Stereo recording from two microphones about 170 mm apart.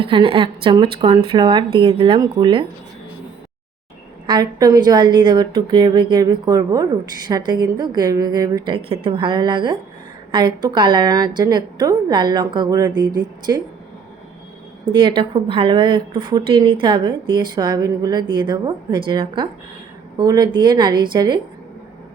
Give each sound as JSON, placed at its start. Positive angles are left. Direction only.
{"t": 0.0, "sound": "speech", "side_deg": -30}
{"t": 4.3, "sound": "a woman's voice", "side_deg": -25}
{"t": 14.8, "sound": "a woman's voice", "side_deg": -30}